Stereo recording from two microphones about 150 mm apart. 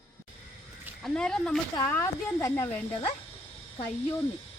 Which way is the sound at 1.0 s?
5° left (ahead or behind).